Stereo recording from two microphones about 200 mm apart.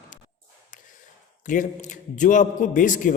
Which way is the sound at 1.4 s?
40° left (ahead or behind).